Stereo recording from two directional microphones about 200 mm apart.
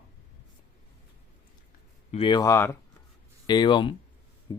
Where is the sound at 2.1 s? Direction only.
25° left (ahead or behind).